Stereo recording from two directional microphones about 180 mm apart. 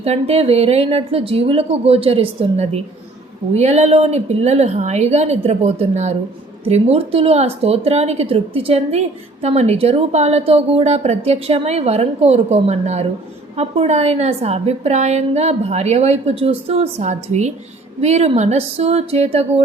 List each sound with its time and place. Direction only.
0.0 s a woman's voice: 35° right (ahead or behind)